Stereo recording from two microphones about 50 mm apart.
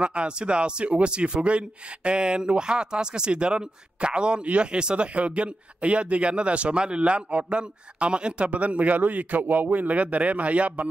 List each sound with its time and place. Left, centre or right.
0.0 s speech: right